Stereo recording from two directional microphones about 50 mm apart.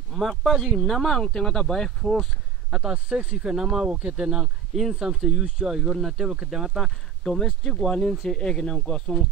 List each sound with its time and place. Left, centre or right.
0.1 s speech: centre
2.7 s speech: centre
3.4 s speech: centre
3.9 s speech: right; by 6.8 s centre
6.8 s speech: centre